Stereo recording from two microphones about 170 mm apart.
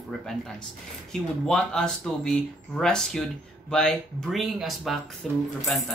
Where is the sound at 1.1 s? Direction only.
5° left (ahead or behind).